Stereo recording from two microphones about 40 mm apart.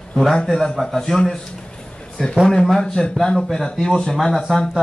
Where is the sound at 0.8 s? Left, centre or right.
Centre.